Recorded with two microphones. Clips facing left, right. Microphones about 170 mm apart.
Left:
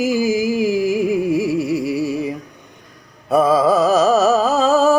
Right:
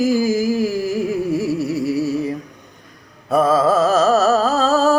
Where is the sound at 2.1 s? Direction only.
15° left (ahead or behind).